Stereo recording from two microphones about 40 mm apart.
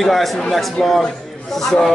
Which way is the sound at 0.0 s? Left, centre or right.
Centre.